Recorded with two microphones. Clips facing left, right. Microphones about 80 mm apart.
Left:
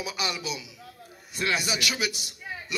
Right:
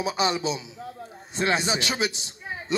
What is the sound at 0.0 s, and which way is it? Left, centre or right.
A man's voice, right.